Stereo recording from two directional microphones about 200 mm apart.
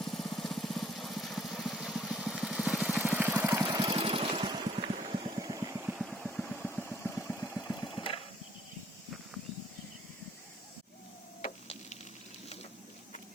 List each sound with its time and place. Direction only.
0.0 s lawn mower: centre (ahead or behind)
6.1 s vehicle: centre (ahead or behind)
7.7 s engine: 20° left (ahead or behind)
11.4 s printer: 35° left (ahead or behind)